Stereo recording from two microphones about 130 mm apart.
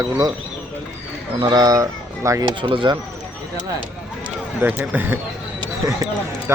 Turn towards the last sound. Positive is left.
turn(degrees=-20)  # may be behind; listen again after turning